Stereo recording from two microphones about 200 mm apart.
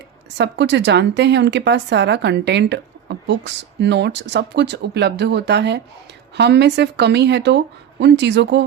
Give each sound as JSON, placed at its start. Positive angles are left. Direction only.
{"t": 0.3, "sound": "a woman's voice", "side_deg": -60}